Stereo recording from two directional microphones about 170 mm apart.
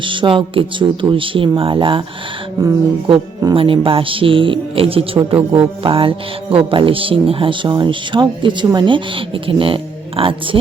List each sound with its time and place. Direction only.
0.0 s speech: 30° right (ahead or behind)